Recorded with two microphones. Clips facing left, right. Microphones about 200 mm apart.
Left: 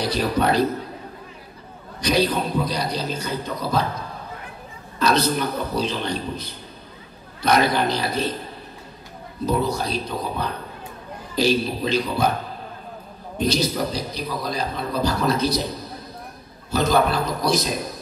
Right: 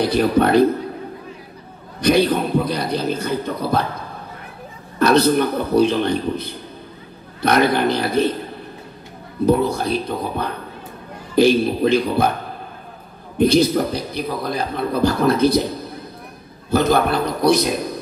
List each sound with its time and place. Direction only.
0.0 s a man's voice: 55° right (ahead or behind)
2.0 s a man's voice: 55° right (ahead or behind)
4.9 s a man's voice: 55° right (ahead or behind)
9.5 s a man's voice: 55° right (ahead or behind)
13.4 s a man's voice: 55° right (ahead or behind)